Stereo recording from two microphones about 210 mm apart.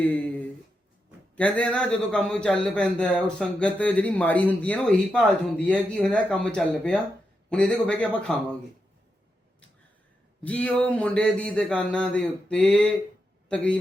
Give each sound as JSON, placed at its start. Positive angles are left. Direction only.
{"t": 0.0, "sound": "a sound", "side_deg": 5}
{"t": 1.4, "sound": "a man's voice", "side_deg": 5}
{"t": 10.4, "sound": "a man's voice", "side_deg": 5}